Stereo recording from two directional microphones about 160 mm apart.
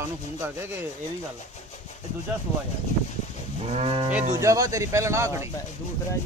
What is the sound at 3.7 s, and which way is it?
Livestock, 40° right (ahead or behind).